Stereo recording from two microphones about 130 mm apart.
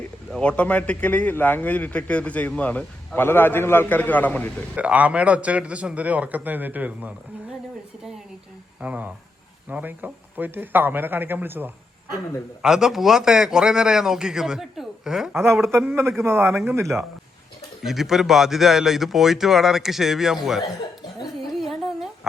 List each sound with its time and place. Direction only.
0.3 s a man's voice: 5° left (ahead or behind)
4.7 s a man's voice: 10° right (ahead or behind)
8.8 s a man's voice: 10° right (ahead or behind)
12.6 s speech: 5° right (ahead or behind)
15.8 s a man's voice: 15° right (ahead or behind)
16.8 s speech: centre (ahead or behind)
21.2 s a sound: centre (ahead or behind)